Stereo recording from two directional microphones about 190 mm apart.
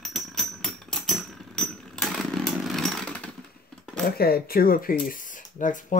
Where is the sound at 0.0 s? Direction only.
Centre (ahead or behind).